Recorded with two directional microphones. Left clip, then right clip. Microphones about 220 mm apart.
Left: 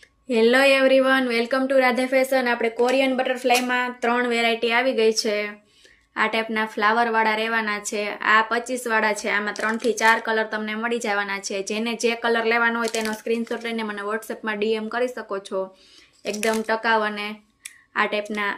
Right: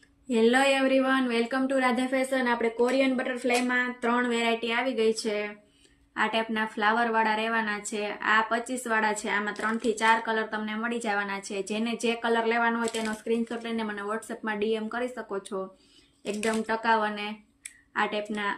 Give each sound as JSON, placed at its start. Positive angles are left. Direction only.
{"t": 0.3, "sound": "a woman's voice", "side_deg": -15}
{"t": 16.6, "sound": "a woman's voice", "side_deg": -15}